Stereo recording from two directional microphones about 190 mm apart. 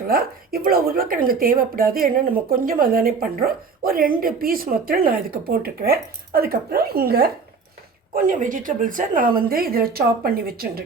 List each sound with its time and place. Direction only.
0.1 s a woman's voice: 50° right (ahead or behind)